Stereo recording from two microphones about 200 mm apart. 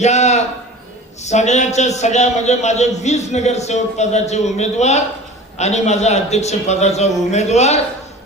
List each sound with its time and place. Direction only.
0.0 s a man's voice: 35° left (ahead or behind)